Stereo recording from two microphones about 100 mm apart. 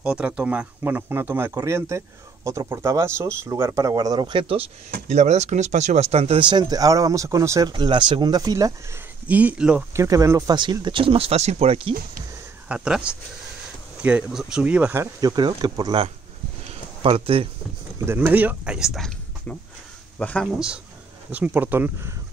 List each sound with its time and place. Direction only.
0.0 s speech: 10° right (ahead or behind); by 4.6 s 60° right (ahead or behind)
5.9 s speech: 90° right
6.6 s speech: 35° right (ahead or behind)
9.3 s speech: 15° right (ahead or behind)
9.9 s speech: 30° right (ahead or behind)
10.5 s speech: 50° right (ahead or behind); by 11.9 s 85° right
12.6 s speech: 10° right (ahead or behind)
15.1 s speech: 45° right (ahead or behind)
17.0 s speech: 65° right (ahead or behind)
17.9 s speech: 25° right (ahead or behind)
18.8 s speech: centre (ahead or behind)
20.5 s speech: 10° right (ahead or behind)